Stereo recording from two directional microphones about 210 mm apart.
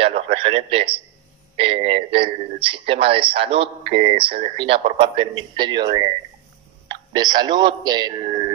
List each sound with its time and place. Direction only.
0.0 s radio: 25° right (ahead or behind)
1.6 s a man's voice: 25° right (ahead or behind)